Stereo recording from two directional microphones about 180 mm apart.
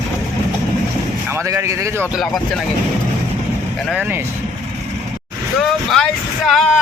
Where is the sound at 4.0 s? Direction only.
10° right (ahead or behind).